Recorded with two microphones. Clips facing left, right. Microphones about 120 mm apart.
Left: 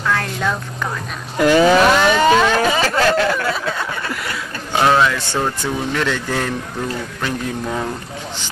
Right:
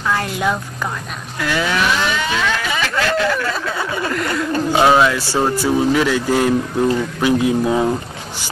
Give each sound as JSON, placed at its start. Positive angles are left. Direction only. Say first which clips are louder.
{"t": 0.0, "sound": "a sound", "louder": "right 1 dB", "side_deg": -10}
{"t": 1.4, "sound": "speech", "louder": "left 8 dB", "side_deg": 35}
{"t": 1.9, "sound": "a sound", "louder": "left 7 dB", "side_deg": 50}
{"t": 3.7, "sound": "speech", "louder": "right 3 dB", "side_deg": -10}
{"t": 4.1, "sound": "speech", "louder": "right 6 dB", "side_deg": 5}
{"t": 4.7, "sound": "speech", "louder": "right 1 dB", "side_deg": -10}